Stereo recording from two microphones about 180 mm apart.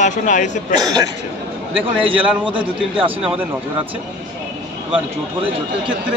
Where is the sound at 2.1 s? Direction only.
30° right (ahead or behind).